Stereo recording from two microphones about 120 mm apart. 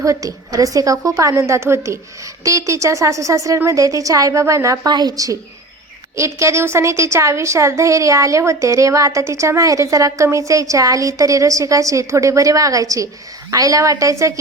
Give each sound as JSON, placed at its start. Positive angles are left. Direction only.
{"t": 0.0, "sound": "a woman's voice", "side_deg": -25}